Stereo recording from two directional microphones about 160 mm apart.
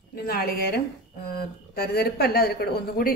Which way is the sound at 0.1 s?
75° left (ahead or behind).